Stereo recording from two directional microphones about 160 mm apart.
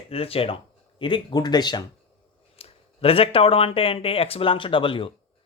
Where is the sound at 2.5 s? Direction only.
40° left (ahead or behind).